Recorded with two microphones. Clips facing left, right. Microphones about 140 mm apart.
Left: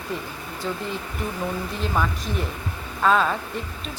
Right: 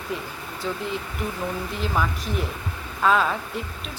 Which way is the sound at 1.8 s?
Centre (ahead or behind).